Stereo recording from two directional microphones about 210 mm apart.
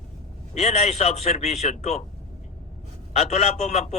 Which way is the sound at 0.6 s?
35° left (ahead or behind).